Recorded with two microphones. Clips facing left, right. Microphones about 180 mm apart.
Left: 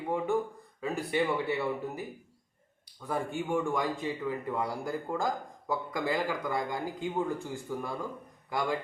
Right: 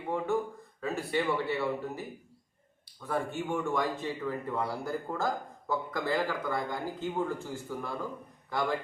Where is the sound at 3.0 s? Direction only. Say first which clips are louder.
Even; 15° left (ahead or behind).